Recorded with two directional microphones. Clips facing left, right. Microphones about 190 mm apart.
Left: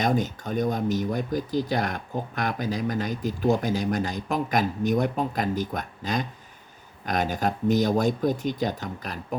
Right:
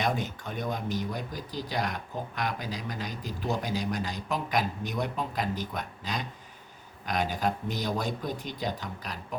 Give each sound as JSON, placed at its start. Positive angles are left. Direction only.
{"t": 0.0, "sound": "speech", "side_deg": 40}